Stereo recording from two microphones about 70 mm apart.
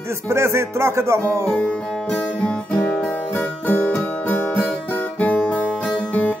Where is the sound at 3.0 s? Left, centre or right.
Left.